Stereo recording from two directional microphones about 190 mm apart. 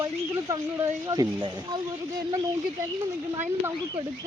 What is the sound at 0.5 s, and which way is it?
Speech, 15° right (ahead or behind).